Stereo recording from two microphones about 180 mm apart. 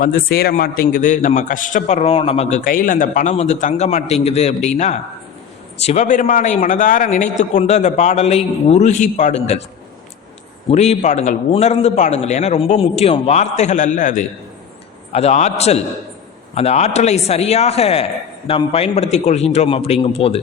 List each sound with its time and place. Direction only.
0.0 s a man's voice: 55° left (ahead or behind); by 2.6 s 35° left (ahead or behind)
2.6 s a man's voice: 50° left (ahead or behind)
10.7 s a man's voice: 35° left (ahead or behind)